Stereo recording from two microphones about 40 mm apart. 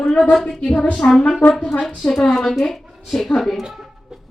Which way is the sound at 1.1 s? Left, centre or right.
Centre.